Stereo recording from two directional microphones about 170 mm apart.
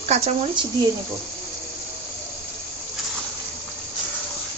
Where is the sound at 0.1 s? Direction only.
40° right (ahead or behind).